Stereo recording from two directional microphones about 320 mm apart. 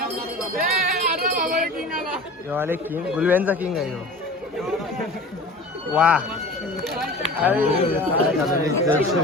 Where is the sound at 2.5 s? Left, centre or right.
Centre.